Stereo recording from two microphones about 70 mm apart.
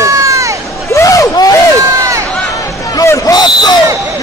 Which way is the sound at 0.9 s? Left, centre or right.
Left.